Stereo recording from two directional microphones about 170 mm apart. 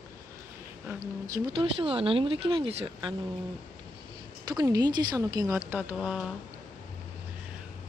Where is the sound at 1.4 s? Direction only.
30° right (ahead or behind).